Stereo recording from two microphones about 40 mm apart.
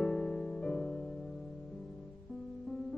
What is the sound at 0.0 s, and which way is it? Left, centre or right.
Music, centre.